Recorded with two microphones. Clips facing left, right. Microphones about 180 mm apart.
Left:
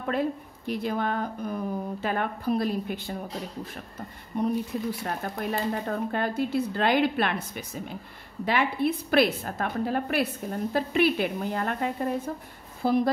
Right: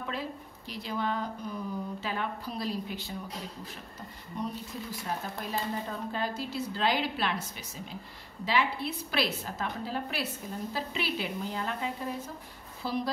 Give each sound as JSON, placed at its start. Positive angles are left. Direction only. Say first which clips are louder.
{"t": 0.0, "sound": "speech", "louder": "left 9 dB", "side_deg": 55}
{"t": 4.3, "sound": "a woman's voice", "louder": "left 9 dB", "side_deg": 55}